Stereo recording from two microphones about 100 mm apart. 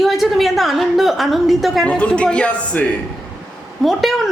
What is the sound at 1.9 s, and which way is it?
Speech, 10° left (ahead or behind).